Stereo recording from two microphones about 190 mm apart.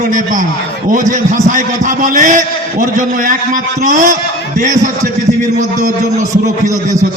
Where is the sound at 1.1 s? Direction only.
40° right (ahead or behind).